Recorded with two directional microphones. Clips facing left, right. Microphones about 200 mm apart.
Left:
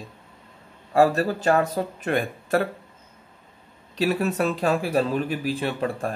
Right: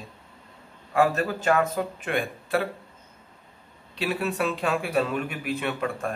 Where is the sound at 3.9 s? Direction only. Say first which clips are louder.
Left 4 dB; 40° left (ahead or behind).